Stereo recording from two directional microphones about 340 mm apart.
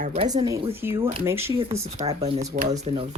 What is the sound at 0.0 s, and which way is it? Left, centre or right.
Speech, centre.